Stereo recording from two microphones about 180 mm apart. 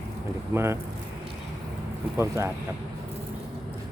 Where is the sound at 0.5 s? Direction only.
15° right (ahead or behind).